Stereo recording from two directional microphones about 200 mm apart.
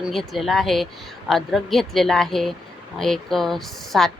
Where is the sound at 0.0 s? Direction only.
Centre (ahead or behind).